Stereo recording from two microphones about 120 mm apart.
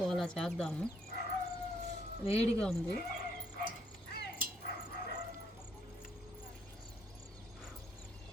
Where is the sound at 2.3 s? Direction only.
5° left (ahead or behind).